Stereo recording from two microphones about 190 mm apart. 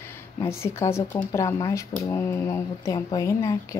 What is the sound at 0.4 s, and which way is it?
Speech, 15° left (ahead or behind).